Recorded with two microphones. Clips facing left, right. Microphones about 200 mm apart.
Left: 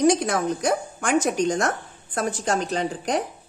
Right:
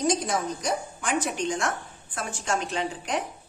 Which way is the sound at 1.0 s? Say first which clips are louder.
Left 9 dB; 45° left (ahead or behind).